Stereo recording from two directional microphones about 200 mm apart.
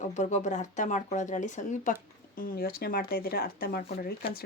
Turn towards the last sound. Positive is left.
turn(degrees=45)  # may be behind; listen again after turning